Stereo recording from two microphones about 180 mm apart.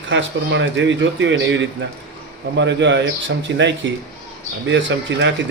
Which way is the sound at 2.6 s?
75° right (ahead or behind).